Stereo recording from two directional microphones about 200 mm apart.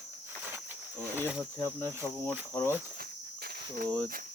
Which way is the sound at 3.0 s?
50° right (ahead or behind).